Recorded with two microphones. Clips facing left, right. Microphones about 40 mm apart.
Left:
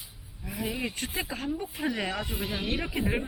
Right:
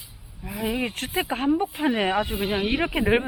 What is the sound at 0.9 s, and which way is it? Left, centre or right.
Speech, right.